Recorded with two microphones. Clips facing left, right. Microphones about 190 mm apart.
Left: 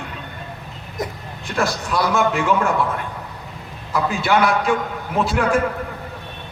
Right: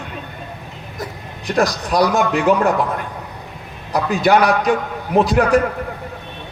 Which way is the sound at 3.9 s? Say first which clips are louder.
Right 4 dB; 40° right (ahead or behind).